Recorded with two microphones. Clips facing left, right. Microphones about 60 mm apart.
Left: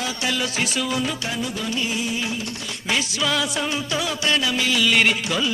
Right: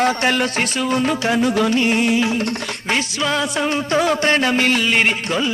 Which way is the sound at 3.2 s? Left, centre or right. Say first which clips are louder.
Right 5 dB; right.